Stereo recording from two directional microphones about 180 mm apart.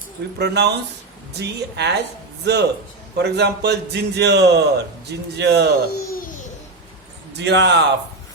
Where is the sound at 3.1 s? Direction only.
65° right (ahead or behind).